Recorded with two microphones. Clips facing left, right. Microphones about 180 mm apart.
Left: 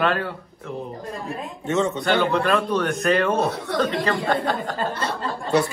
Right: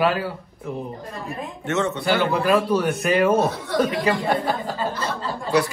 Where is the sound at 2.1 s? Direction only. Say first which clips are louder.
Right 1 dB; centre (ahead or behind).